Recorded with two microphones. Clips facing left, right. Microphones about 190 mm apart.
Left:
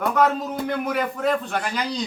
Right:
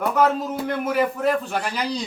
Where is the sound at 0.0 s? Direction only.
5° right (ahead or behind).